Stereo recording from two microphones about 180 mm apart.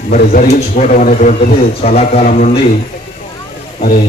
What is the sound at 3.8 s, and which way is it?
Speech, 50° left (ahead or behind).